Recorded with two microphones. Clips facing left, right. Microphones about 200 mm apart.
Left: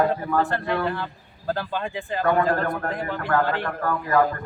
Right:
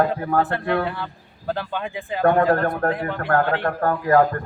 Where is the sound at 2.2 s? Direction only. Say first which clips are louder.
Right 4 dB; 55° right (ahead or behind).